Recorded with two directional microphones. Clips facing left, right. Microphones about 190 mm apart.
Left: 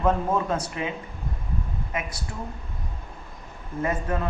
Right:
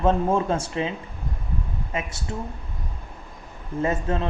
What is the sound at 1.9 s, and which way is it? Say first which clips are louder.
Speech: right 3 dB; 25° right (ahead or behind).